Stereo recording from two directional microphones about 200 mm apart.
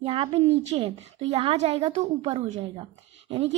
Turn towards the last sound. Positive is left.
turn(degrees=-30)  # may be behind; listen again after turning